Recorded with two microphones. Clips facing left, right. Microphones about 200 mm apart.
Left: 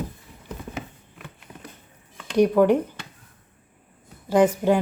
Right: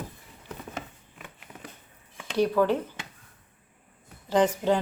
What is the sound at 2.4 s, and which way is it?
Speech, 15° left (ahead or behind).